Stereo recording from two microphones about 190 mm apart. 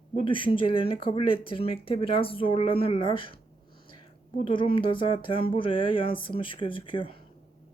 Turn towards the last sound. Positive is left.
turn(degrees=25)  # may be behind; listen again after turning